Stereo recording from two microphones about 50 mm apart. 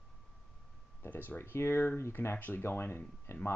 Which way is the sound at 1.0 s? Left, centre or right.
Left.